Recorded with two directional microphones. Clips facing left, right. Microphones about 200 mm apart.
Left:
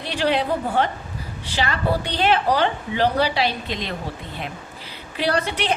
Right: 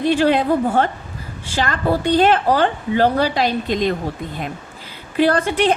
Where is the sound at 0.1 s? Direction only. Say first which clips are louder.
Right 4 dB; 45° right (ahead or behind).